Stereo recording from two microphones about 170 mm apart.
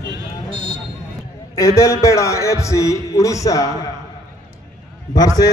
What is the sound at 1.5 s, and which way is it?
A man's voice, 15° left (ahead or behind).